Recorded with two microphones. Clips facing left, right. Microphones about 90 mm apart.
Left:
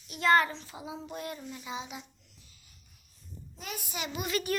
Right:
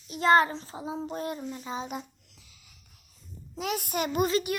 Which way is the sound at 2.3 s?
90° right.